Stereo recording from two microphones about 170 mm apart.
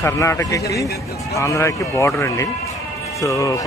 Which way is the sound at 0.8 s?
70° left (ahead or behind).